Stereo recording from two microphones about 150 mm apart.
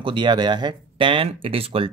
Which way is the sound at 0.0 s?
30° right (ahead or behind).